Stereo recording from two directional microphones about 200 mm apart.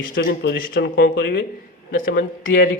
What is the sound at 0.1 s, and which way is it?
Speech, 50° left (ahead or behind).